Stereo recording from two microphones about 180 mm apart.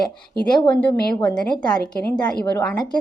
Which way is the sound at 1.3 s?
5° left (ahead or behind).